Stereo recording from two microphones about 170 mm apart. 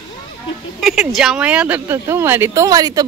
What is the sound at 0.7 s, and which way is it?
Speech, centre (ahead or behind).